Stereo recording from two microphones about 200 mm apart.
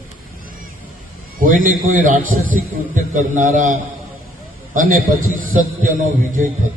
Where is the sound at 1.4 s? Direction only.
40° right (ahead or behind).